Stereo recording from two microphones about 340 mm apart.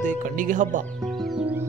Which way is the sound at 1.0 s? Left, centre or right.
Centre.